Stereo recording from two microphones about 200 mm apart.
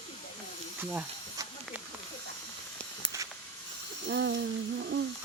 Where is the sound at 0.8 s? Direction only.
10° right (ahead or behind).